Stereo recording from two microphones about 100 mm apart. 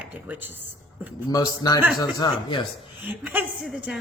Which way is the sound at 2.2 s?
50° left (ahead or behind).